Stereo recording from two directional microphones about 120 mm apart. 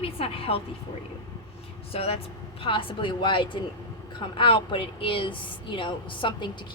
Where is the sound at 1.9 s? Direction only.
55° left (ahead or behind).